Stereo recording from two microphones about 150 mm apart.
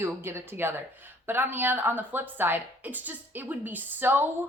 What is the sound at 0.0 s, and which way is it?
Speech, 15° right (ahead or behind).